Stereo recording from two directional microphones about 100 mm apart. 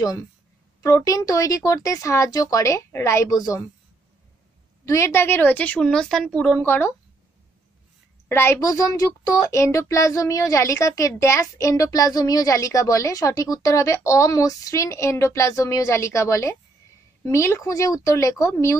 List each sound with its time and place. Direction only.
0.8 s speech: 35° left (ahead or behind)
4.8 s a woman's voice: 30° left (ahead or behind); by 6.6 s 10° left (ahead or behind)
6.6 s a woman's voice: 20° left (ahead or behind)
8.3 s a woman's voice: 25° left (ahead or behind)
8.6 s speech: 35° left (ahead or behind)